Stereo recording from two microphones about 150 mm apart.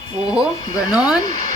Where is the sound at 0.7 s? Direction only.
5° right (ahead or behind).